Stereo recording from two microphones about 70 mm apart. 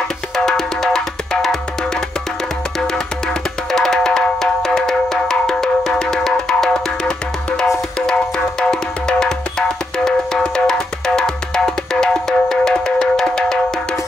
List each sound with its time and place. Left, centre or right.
0.5 s music: centre
3.7 s music: centre